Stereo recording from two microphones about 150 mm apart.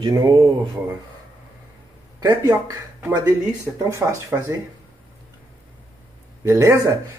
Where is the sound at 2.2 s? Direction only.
25° right (ahead or behind).